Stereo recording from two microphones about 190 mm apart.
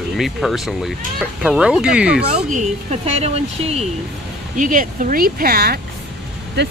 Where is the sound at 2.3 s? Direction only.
35° right (ahead or behind).